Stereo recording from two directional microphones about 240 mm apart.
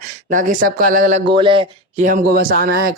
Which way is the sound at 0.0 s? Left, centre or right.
Right.